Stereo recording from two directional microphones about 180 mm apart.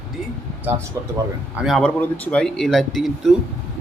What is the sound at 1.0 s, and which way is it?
Speech, 15° right (ahead or behind).